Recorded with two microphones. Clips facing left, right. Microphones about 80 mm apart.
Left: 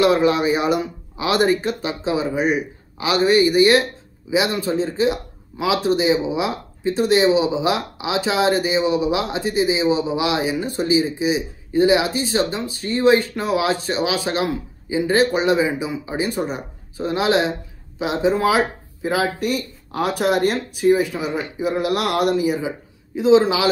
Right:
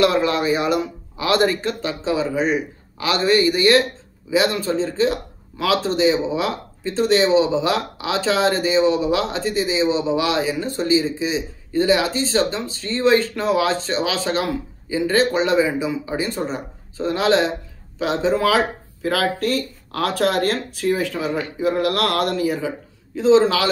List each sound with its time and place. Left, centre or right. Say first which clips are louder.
0.0 s speech: left 2 dB; centre